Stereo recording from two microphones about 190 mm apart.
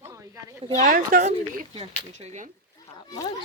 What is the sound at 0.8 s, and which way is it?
Speech, 40° right (ahead or behind).